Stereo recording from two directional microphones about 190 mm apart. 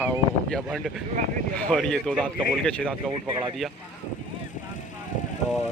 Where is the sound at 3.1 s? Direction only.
25° right (ahead or behind).